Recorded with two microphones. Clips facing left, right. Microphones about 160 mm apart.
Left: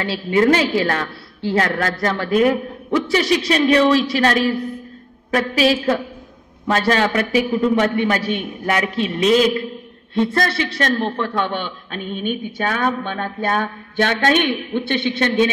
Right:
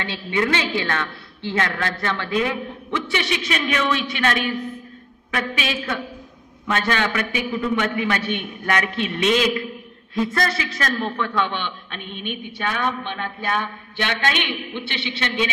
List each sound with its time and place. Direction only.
0.0 s a woman's voice: 35° left (ahead or behind)